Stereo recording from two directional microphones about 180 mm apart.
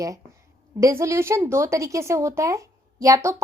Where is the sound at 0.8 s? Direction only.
15° right (ahead or behind).